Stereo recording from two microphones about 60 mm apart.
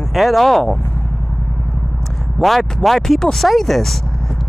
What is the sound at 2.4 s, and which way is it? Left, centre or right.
Speech, centre.